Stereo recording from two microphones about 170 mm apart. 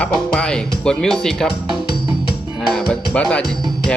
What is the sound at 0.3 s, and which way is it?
Speech, 5° left (ahead or behind).